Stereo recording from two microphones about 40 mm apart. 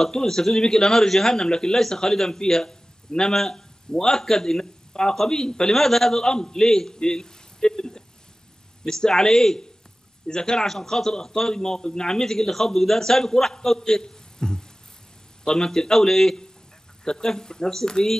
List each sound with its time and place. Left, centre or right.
0.0 s a man's voice: centre